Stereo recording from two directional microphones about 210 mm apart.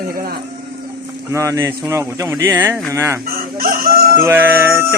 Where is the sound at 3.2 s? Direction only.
45° right (ahead or behind).